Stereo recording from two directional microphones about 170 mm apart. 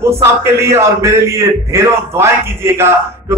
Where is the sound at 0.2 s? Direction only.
15° right (ahead or behind).